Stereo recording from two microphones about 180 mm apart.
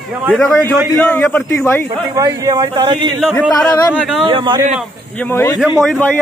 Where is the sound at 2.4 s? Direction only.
20° right (ahead or behind).